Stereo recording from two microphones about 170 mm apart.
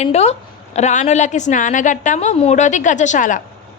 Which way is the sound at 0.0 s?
40° left (ahead or behind).